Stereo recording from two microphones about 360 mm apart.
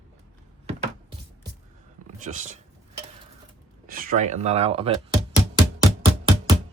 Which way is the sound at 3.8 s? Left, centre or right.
Right.